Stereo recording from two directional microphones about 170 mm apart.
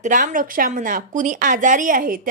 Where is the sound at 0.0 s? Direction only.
45° right (ahead or behind).